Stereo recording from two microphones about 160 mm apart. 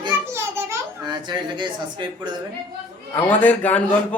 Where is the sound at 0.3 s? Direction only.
20° right (ahead or behind).